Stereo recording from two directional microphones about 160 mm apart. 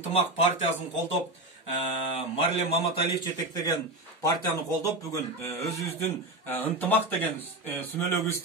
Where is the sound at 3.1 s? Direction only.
25° left (ahead or behind).